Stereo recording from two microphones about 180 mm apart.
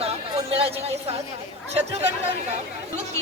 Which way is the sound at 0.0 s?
35° right (ahead or behind).